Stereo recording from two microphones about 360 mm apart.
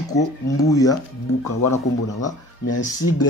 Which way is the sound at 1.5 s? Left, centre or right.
Left.